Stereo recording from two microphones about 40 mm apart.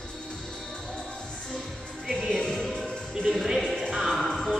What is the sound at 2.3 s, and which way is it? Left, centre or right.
Music, centre.